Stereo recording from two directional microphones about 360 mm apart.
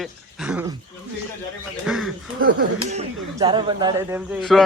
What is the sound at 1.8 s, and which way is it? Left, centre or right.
Speech, centre.